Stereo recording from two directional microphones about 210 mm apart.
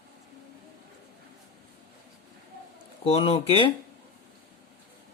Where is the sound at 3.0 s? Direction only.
25° left (ahead or behind).